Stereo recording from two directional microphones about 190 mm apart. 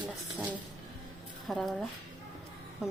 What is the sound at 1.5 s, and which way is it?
Speech, centre (ahead or behind).